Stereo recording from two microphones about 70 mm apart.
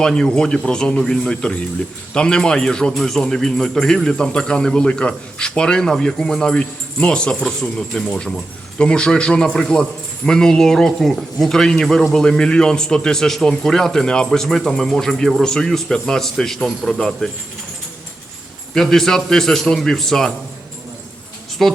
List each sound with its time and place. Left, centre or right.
0.0 s a man's voice: centre
18.7 s a man's voice: centre
21.6 s speech: centre